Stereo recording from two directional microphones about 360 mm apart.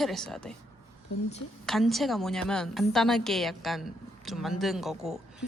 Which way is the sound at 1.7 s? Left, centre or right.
Centre.